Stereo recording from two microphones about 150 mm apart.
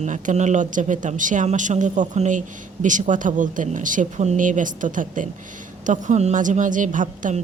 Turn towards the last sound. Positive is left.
turn(degrees=-60)  # may be behind; listen again after turning